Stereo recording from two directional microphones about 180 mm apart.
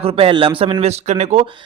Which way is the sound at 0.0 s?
30° right (ahead or behind).